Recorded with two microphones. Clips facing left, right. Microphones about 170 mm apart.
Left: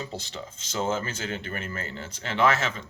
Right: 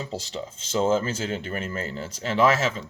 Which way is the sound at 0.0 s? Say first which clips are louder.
Right 4 dB; 30° right (ahead or behind).